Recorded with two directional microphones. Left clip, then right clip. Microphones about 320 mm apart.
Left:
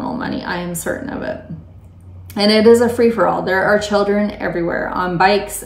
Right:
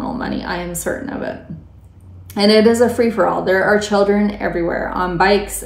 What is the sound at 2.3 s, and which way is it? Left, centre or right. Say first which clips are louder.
A woman's voice: left 1 dB; centre.